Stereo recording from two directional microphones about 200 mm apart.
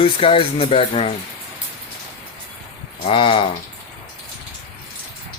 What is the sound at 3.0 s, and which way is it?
Speech, 25° left (ahead or behind).